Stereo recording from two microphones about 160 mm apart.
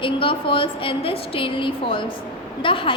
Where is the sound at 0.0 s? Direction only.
30° left (ahead or behind).